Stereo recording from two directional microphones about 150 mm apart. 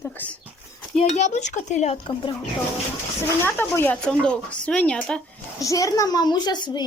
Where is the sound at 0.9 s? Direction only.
45° left (ahead or behind).